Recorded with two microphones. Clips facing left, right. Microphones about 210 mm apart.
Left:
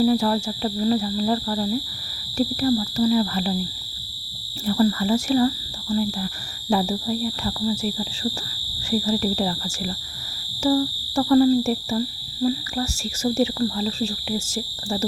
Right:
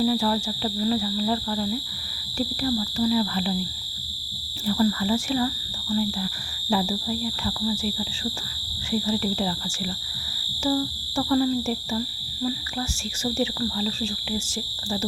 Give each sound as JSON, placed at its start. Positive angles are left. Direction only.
{"t": 0.0, "sound": "speech", "side_deg": 45}
{"t": 4.6, "sound": "speech", "side_deg": 45}
{"t": 6.7, "sound": "speech", "side_deg": 45}
{"t": 10.6, "sound": "speech", "side_deg": 40}